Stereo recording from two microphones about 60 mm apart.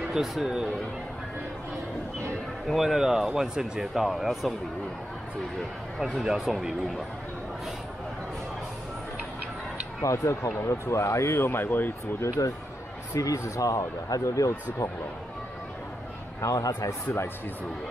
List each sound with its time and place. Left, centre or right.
0.1 s speech: centre
2.6 s speech: centre
6.2 s speech: centre
10.0 s speech: left
12.4 s speech: left
13.1 s speech: left
16.3 s speech: left